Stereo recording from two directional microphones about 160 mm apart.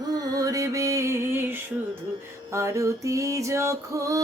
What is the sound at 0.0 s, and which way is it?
Music, 25° right (ahead or behind).